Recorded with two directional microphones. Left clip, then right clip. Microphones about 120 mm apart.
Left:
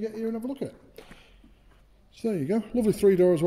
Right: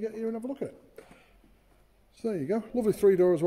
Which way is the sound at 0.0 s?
15° left (ahead or behind).